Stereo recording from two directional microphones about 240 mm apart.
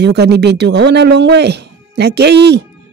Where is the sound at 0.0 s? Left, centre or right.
Right.